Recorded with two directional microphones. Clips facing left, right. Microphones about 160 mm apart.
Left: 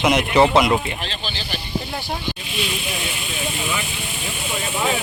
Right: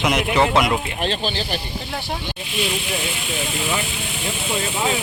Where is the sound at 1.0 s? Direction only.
45° right (ahead or behind).